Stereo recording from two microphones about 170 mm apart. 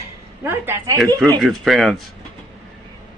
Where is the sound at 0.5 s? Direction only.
15° right (ahead or behind).